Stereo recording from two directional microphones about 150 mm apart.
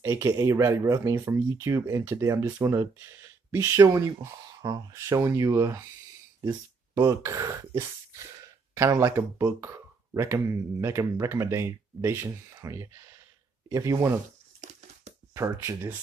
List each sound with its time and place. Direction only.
0.0 s speech: 20° right (ahead or behind)
7.0 s speech: 20° right (ahead or behind)
14.6 s a sound: 50° right (ahead or behind)
15.3 s speech: 20° right (ahead or behind)